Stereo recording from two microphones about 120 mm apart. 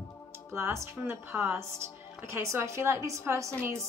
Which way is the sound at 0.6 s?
20° right (ahead or behind).